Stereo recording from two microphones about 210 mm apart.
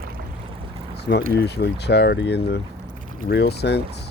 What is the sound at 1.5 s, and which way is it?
Speech, 50° left (ahead or behind).